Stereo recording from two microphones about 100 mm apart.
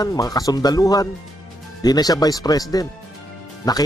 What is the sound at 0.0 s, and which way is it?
Speech, 40° left (ahead or behind).